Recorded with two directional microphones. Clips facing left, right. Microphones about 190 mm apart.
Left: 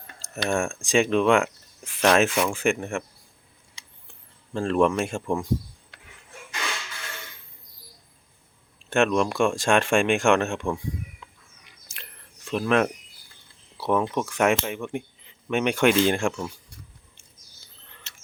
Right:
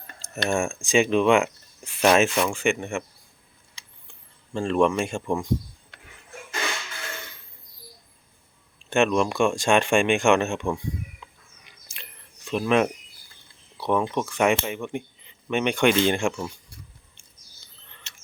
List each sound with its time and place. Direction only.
0.1 s speech: centre (ahead or behind)
4.5 s speech: centre (ahead or behind)
8.9 s speech: centre (ahead or behind)
12.5 s speech: centre (ahead or behind)
17.8 s bird: 5° left (ahead or behind)